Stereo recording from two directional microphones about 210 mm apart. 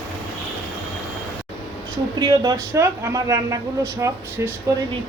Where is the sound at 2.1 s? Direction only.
20° right (ahead or behind).